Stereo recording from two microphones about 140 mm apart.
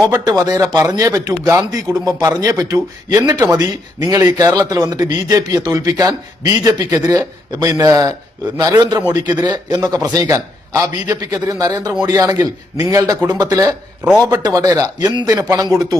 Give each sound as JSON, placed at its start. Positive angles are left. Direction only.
{"t": 0.1, "sound": "a man's voice", "side_deg": -25}